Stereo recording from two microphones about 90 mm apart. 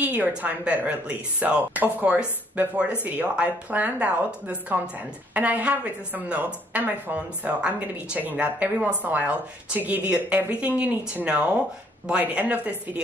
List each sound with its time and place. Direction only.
0.0 s a woman's voice: 20° right (ahead or behind)